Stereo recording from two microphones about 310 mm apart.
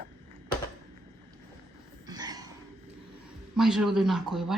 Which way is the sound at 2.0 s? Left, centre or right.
Centre.